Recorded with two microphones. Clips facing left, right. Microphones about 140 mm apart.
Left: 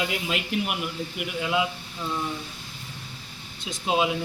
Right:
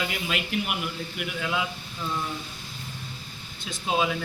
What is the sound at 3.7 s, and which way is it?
Speech, 15° left (ahead or behind).